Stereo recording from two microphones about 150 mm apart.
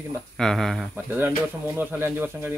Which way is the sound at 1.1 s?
15° right (ahead or behind).